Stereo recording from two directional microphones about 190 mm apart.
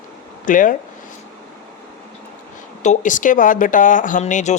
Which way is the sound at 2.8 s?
40° left (ahead or behind).